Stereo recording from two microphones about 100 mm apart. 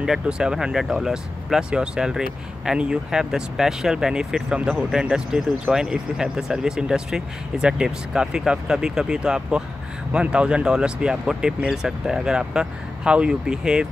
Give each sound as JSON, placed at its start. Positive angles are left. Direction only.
{"t": 0.0, "sound": "speech", "side_deg": -5}